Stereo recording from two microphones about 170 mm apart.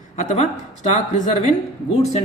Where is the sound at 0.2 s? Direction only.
45° left (ahead or behind).